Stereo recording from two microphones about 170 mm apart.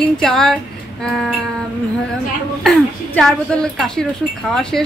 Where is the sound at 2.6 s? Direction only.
5° left (ahead or behind).